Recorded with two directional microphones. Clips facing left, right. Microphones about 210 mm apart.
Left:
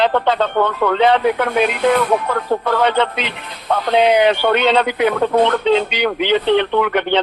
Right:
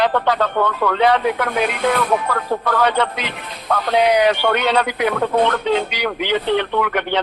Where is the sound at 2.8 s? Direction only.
25° left (ahead or behind).